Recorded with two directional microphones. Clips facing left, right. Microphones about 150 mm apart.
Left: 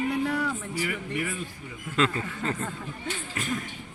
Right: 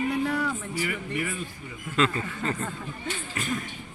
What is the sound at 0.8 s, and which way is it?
Speech, 45° left (ahead or behind).